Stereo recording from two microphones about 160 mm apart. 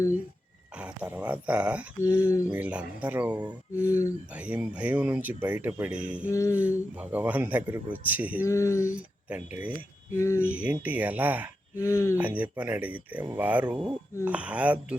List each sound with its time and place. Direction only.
0.8 s speech: 10° right (ahead or behind)
2.0 s speech: 20° left (ahead or behind)
2.5 s speech: 10° right (ahead or behind)
3.8 s speech: 20° left (ahead or behind)
4.3 s speech: 10° right (ahead or behind)
6.3 s speech: 20° left (ahead or behind)
6.9 s speech: 10° right (ahead or behind)
8.4 s speech: 20° left (ahead or behind)
9.0 s speech: 10° right (ahead or behind)
10.2 s speech: 20° left (ahead or behind)
10.5 s speech: 10° right (ahead or behind)
11.8 s speech: 20° left (ahead or behind)
12.1 s speech: 10° right (ahead or behind)